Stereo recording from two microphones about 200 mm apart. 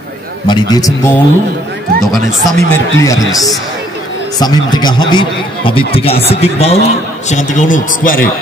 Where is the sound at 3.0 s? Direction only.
15° left (ahead or behind).